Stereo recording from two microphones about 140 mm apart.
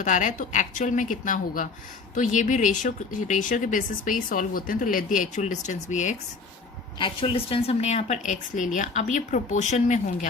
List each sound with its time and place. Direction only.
0.0 s a woman's voice: 65° left (ahead or behind)
7.0 s a woman's voice: 35° left (ahead or behind); by 10.2 s 55° left (ahead or behind)